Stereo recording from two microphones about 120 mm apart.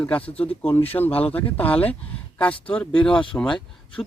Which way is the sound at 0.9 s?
20° left (ahead or behind).